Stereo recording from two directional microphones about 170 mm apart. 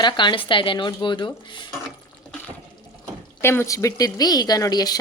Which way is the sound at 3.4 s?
15° left (ahead or behind).